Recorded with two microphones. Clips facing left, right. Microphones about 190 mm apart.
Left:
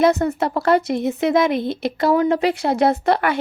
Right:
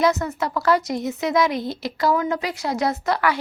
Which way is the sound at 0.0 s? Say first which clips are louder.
Left 4 dB; 55° left (ahead or behind).